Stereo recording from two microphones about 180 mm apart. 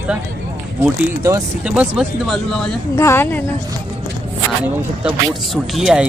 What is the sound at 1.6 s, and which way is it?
Speech, 10° right (ahead or behind).